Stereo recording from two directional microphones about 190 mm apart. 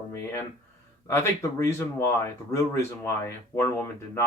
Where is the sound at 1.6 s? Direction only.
15° left (ahead or behind).